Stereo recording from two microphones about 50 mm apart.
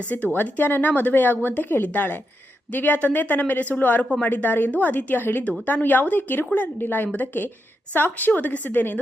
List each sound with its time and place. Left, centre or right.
0.0 s a woman's voice: left